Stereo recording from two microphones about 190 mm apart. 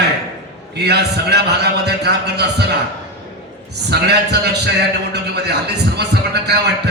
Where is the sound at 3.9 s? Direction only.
60° right (ahead or behind).